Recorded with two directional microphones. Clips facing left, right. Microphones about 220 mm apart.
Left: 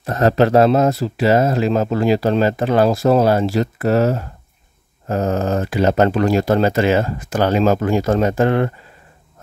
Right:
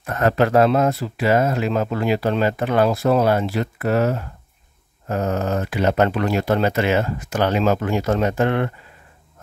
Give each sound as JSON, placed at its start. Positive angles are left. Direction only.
{"t": 0.0, "sound": "speech", "side_deg": 30}
{"t": 5.0, "sound": "a sound", "side_deg": 30}
{"t": 5.7, "sound": "speech", "side_deg": 40}